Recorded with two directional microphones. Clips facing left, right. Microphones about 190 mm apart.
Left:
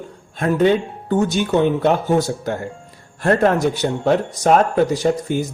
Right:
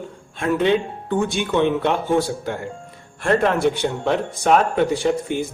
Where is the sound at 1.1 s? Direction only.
40° left (ahead or behind).